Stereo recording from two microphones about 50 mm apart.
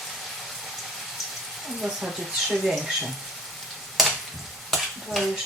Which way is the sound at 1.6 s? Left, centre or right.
Centre.